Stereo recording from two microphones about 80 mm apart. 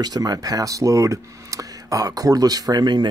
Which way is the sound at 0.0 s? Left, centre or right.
Right.